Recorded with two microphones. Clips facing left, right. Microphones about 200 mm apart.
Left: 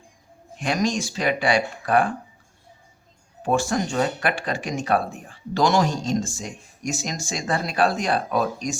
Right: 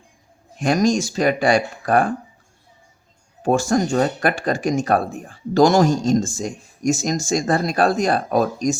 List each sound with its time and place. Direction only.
0.6 s speech: 45° right (ahead or behind)
3.4 s speech: 45° right (ahead or behind)